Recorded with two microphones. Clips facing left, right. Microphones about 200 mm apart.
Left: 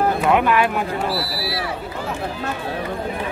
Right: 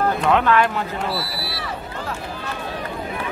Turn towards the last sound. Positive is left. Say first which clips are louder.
# left 3 dB
turn(degrees=0)  # may be behind; listen again after turning